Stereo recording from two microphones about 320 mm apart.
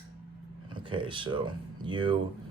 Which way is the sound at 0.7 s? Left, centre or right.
Centre.